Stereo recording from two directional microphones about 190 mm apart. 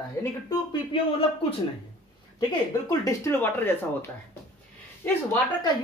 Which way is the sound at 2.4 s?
20° left (ahead or behind).